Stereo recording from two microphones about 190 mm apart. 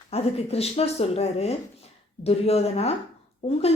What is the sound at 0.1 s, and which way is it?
A woman's voice, 35° left (ahead or behind).